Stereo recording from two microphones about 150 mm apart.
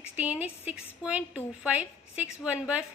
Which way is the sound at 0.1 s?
10° right (ahead or behind).